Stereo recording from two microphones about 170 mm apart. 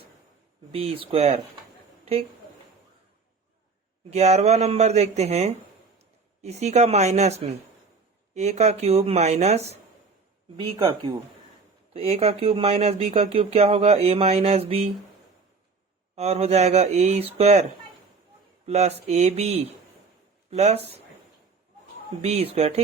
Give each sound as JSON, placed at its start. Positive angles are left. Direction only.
{"t": 0.7, "sound": "speech", "side_deg": -35}
{"t": 4.1, "sound": "speech", "side_deg": -40}
{"t": 10.6, "sound": "speech", "side_deg": -25}
{"t": 11.9, "sound": "speech", "side_deg": -40}
{"t": 16.1, "sound": "speech", "side_deg": -40}
{"t": 22.2, "sound": "speech", "side_deg": -40}